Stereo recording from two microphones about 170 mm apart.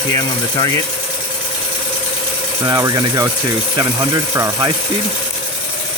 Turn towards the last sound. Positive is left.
turn(degrees=-20)  # may be behind; listen again after turning